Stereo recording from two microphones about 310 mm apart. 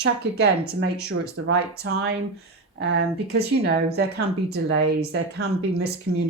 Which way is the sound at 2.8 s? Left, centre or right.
Right.